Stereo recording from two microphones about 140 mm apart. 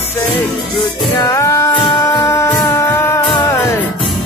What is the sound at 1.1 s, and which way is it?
Music, 25° left (ahead or behind).